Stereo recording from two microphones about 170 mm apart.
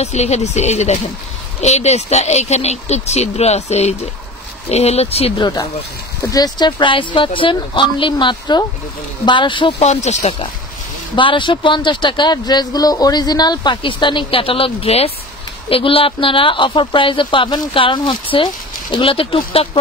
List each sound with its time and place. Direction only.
0.0 s a woman's voice: 40° left (ahead or behind)
6.2 s a woman's voice: 20° left (ahead or behind); by 10.3 s 40° left (ahead or behind)
11.1 s a woman's voice: 30° left (ahead or behind)